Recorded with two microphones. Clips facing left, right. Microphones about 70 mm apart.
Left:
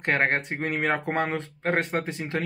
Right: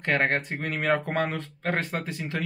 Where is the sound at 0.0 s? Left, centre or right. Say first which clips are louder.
Left 1 dB; left.